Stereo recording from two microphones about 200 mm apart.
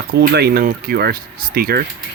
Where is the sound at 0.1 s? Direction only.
55° right (ahead or behind).